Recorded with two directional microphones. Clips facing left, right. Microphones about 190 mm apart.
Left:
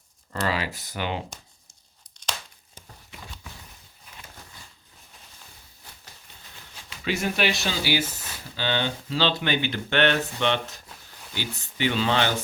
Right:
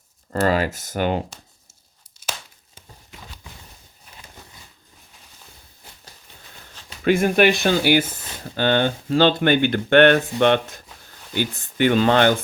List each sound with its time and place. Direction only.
0.4 s speech: 45° right (ahead or behind)
7.0 s speech: 55° right (ahead or behind)